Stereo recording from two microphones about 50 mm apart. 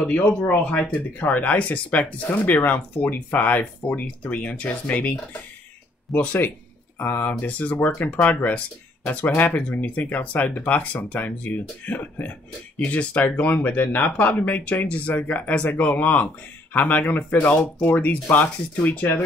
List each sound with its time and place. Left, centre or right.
0.2 s speech: left
6.1 s speech: left
7.7 s speech: left